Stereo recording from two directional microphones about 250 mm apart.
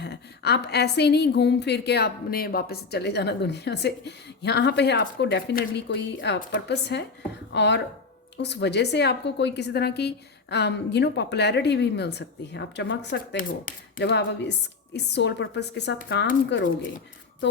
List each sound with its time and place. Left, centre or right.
0.0 s a woman's voice: left